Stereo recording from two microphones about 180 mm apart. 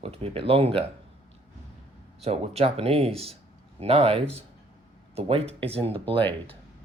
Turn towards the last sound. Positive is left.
turn(degrees=-30)  # may be behind; listen again after turning